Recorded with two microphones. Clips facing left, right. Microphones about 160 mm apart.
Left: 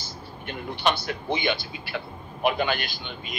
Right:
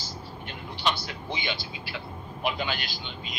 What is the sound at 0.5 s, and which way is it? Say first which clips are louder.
A man's voice: left 5 dB; 55° left (ahead or behind).